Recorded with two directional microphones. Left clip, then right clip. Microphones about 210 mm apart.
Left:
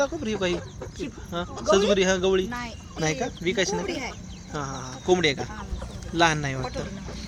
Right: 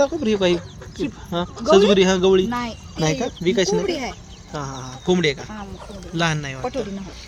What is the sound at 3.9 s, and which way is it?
Speech, 45° right (ahead or behind).